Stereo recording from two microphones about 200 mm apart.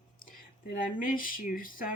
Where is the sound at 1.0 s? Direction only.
45° left (ahead or behind).